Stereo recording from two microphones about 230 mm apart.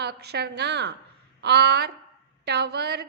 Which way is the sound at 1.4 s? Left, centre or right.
Right.